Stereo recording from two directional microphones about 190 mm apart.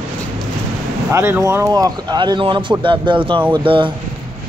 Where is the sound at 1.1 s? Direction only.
10° right (ahead or behind).